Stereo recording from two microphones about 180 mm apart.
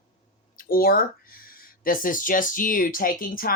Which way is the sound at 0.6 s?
55° left (ahead or behind).